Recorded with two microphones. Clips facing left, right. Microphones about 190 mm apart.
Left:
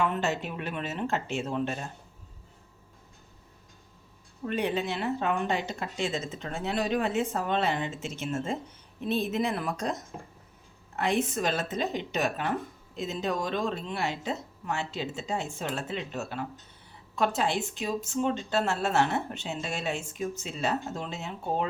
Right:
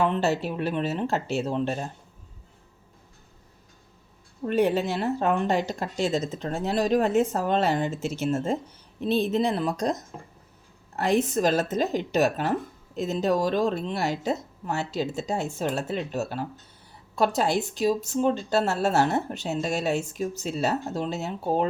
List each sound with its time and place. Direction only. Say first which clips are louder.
0.0 s speech: right 5 dB; 35° right (ahead or behind)
4.4 s speech: right 6 dB; 40° right (ahead or behind)